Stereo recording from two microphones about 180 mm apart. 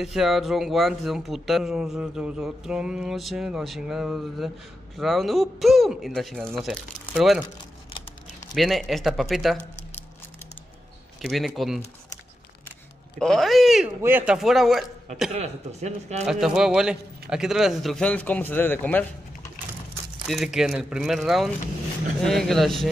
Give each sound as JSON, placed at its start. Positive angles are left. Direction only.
{"t": 0.0, "sound": "speech", "side_deg": 0}
{"t": 8.5, "sound": "speech", "side_deg": 0}
{"t": 11.1, "sound": "speech", "side_deg": 0}
{"t": 13.2, "sound": "speech", "side_deg": 0}
{"t": 15.3, "sound": "speech", "side_deg": -40}
{"t": 16.3, "sound": "speech", "side_deg": -5}
{"t": 20.2, "sound": "speech", "side_deg": 0}